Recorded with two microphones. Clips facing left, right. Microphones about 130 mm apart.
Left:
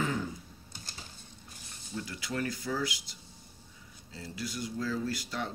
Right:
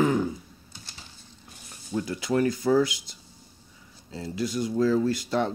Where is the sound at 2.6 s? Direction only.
45° right (ahead or behind).